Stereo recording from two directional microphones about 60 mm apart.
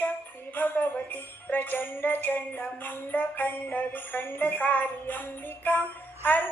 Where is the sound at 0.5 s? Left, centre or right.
Left.